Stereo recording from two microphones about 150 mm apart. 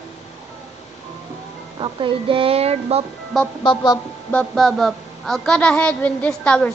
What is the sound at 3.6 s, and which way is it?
Speech, 30° left (ahead or behind).